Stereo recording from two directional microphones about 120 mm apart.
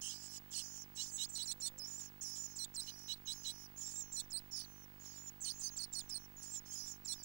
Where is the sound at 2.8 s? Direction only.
15° right (ahead or behind).